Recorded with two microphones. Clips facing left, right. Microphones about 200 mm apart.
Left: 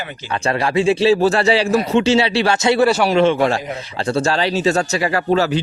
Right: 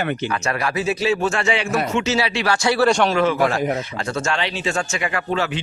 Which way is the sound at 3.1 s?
25° left (ahead or behind).